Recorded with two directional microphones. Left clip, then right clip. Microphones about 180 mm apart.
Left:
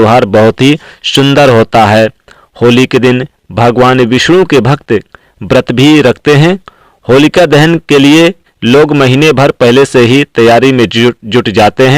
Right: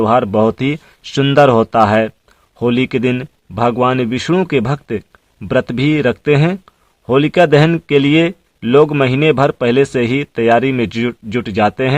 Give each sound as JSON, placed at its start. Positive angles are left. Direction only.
{"t": 0.1, "sound": "a man's voice", "side_deg": 30}
{"t": 1.4, "sound": "a man's voice", "side_deg": 35}